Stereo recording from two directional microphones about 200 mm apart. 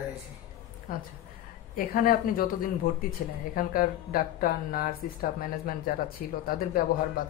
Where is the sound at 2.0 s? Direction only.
45° left (ahead or behind).